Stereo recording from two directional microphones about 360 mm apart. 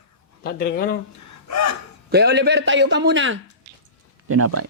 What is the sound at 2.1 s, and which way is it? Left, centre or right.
A man's voice, right.